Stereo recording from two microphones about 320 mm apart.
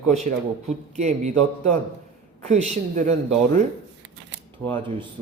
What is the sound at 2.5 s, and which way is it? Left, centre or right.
Speech, right.